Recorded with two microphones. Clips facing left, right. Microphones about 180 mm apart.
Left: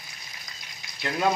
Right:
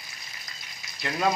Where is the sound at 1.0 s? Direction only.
Centre (ahead or behind).